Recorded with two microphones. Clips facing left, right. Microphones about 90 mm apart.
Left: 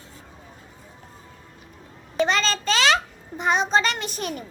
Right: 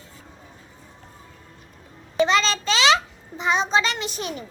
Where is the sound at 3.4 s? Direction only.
50° left (ahead or behind).